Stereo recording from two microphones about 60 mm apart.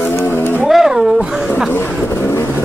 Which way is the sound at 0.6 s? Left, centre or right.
Centre.